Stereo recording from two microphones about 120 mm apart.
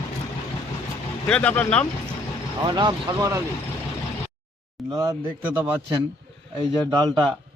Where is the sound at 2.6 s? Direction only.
35° right (ahead or behind).